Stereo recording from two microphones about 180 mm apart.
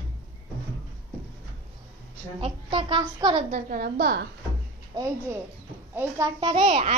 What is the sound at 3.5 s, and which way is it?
Speech, 50° right (ahead or behind).